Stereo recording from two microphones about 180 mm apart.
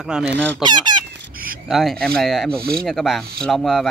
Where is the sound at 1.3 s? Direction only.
55° right (ahead or behind).